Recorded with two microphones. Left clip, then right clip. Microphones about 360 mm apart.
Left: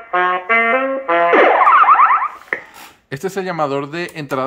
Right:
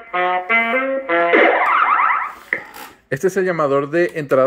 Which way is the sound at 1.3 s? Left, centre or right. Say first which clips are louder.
Left 4 dB; left.